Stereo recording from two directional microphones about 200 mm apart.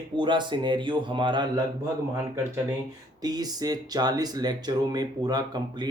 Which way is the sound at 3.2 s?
20° right (ahead or behind).